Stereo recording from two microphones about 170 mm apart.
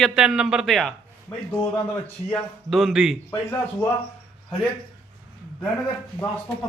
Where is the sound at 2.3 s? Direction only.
Centre (ahead or behind).